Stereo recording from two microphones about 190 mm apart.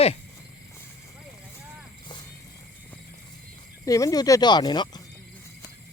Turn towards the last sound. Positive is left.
turn(degrees=20)  # may be behind; listen again after turning